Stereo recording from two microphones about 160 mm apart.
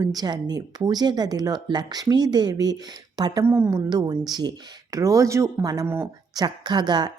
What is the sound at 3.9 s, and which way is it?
Speech, 25° right (ahead or behind).